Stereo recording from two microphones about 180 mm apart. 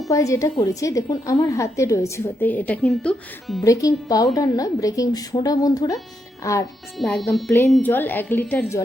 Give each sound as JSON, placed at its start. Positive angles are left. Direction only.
{"t": 0.1, "sound": "a woman's voice", "side_deg": 15}
{"t": 3.6, "sound": "a woman's voice", "side_deg": 20}
{"t": 7.0, "sound": "a woman's voice", "side_deg": 5}